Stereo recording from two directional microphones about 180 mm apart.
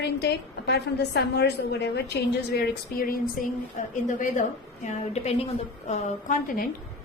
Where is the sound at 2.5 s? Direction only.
55° left (ahead or behind).